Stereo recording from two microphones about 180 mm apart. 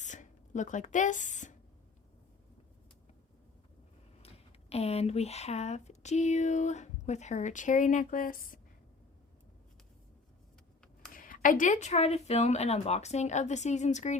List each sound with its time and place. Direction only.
0.0 s a sound: 45° left (ahead or behind)
4.7 s speech: 35° left (ahead or behind); by 8.6 s 50° left (ahead or behind)
11.1 s speech: 50° left (ahead or behind)